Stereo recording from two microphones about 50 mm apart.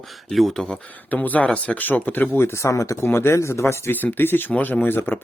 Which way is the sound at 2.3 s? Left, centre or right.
Left.